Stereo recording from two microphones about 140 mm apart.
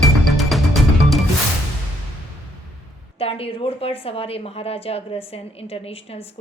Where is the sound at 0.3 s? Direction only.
Centre (ahead or behind).